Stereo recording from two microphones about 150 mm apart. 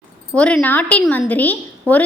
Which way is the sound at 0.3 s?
10° left (ahead or behind).